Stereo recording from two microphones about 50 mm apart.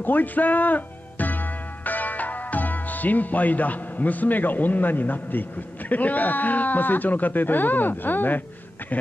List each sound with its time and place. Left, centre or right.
0.0 s speech: left